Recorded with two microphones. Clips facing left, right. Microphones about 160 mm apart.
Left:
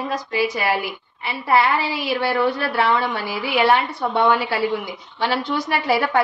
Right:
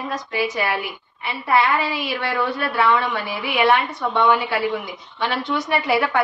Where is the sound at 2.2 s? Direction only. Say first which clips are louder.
Left 5 dB; 30° left (ahead or behind).